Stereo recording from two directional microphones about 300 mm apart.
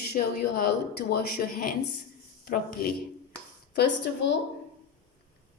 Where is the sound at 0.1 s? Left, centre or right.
Left.